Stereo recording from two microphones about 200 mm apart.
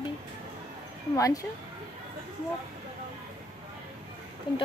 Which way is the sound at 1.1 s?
15° left (ahead or behind).